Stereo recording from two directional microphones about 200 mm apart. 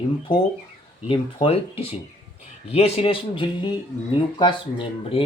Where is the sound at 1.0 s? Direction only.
25° left (ahead or behind).